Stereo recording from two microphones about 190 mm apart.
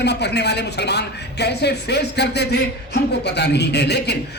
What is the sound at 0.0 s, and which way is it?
A woman's voice, 60° left (ahead or behind).